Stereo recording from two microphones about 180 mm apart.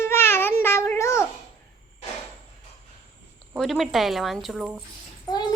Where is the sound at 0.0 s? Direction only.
15° left (ahead or behind).